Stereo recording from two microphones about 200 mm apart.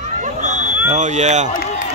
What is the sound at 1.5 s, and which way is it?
Speech, 40° left (ahead or behind).